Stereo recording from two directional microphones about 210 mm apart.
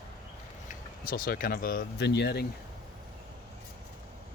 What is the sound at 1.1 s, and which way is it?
Speech, 45° left (ahead or behind).